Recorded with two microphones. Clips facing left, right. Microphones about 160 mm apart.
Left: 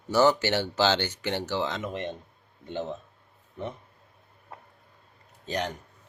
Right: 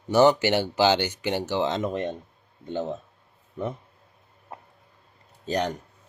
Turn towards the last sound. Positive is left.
turn(degrees=-35)  # may be behind; listen again after turning